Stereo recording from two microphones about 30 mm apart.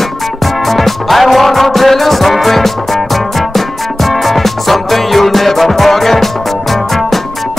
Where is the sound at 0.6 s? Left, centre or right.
Centre.